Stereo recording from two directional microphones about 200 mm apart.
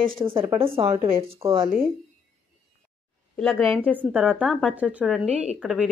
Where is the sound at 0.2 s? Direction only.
25° right (ahead or behind).